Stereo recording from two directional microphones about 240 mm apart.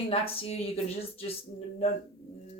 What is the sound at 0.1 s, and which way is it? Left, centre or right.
Speech, left.